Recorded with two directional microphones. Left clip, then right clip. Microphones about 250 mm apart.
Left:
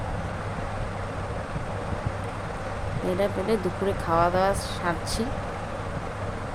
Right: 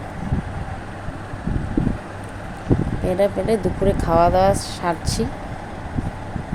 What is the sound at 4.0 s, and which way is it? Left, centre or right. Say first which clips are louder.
Speech: right 6 dB; centre.